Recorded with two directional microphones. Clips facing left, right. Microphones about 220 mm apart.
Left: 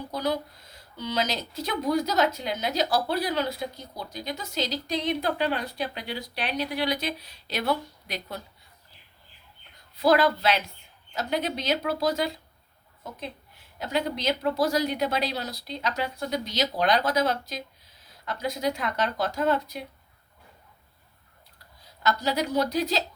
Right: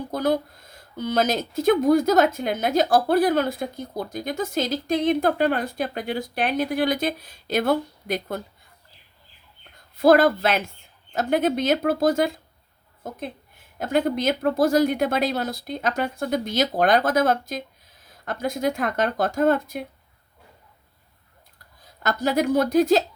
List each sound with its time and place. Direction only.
0.1 s speech: 50° right (ahead or behind)
10.0 s a woman's voice: 50° right (ahead or behind)
22.0 s speech: 50° right (ahead or behind)